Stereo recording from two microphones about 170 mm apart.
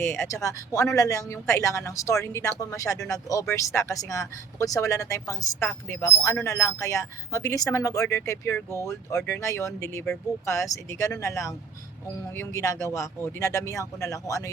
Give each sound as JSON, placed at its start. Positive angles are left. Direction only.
{"t": 0.0, "sound": "speech", "side_deg": 15}